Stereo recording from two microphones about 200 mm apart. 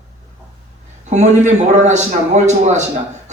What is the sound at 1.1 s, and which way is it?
A man's voice, 35° right (ahead or behind).